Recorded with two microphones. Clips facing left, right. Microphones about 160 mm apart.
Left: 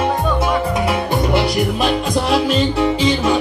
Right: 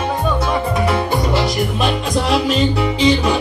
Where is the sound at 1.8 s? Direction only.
Centre (ahead or behind).